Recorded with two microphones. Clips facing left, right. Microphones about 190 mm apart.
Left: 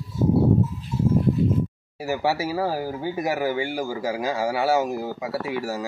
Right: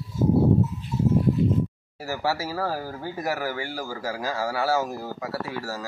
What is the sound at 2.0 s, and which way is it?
Speech, 20° left (ahead or behind).